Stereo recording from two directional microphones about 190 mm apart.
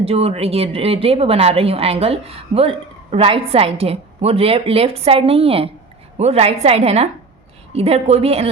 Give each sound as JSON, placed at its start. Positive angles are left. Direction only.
{"t": 0.0, "sound": "a woman's voice", "side_deg": -30}